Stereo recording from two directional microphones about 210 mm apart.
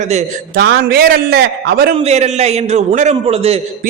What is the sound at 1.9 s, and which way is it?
A man's voice, 30° right (ahead or behind).